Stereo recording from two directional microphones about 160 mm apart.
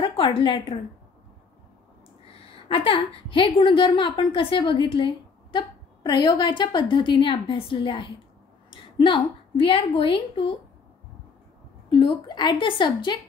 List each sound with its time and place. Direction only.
0.0 s a woman's voice: 35° left (ahead or behind)
2.7 s a woman's voice: 35° left (ahead or behind)
11.9 s a woman's voice: 30° left (ahead or behind)